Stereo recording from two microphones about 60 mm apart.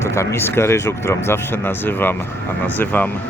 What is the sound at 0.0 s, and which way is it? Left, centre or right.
Speech, left.